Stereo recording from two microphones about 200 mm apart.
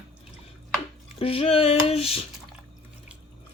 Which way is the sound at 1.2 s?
30° left (ahead or behind).